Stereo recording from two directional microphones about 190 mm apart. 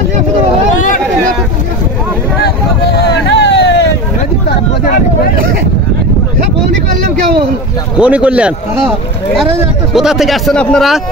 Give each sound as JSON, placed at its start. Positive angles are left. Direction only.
{"t": 3.3, "sound": "hubbub", "side_deg": 65}
{"t": 8.0, "sound": "speech", "side_deg": -5}
{"t": 9.9, "sound": "a man's voice", "side_deg": 0}